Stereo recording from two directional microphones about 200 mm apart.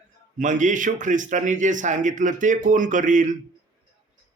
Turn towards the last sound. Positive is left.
turn(degrees=-40)  # may be behind; listen again after turning